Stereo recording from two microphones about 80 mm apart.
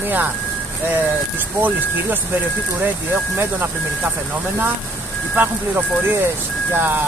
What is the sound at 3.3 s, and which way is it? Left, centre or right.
Speech, right.